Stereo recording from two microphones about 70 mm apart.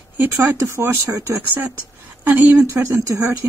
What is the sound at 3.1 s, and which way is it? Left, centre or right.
Speech, right.